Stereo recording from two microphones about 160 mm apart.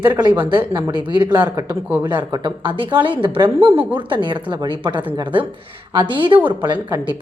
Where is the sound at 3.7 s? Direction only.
10° right (ahead or behind).